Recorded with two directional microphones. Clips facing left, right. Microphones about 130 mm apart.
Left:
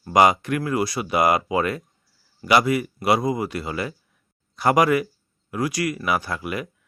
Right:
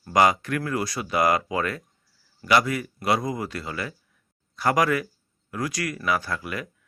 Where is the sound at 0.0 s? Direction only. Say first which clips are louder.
Left 3 dB; 15° left (ahead or behind).